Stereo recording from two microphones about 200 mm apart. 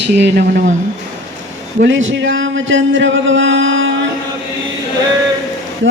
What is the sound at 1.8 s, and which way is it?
Speech, 70° right (ahead or behind).